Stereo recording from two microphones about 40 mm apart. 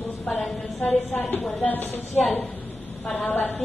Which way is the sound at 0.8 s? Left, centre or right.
Left.